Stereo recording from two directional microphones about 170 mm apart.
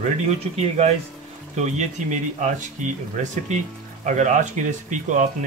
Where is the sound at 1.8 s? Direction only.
45° right (ahead or behind).